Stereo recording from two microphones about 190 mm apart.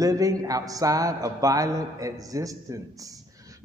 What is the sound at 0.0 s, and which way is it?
A man's voice, 20° right (ahead or behind).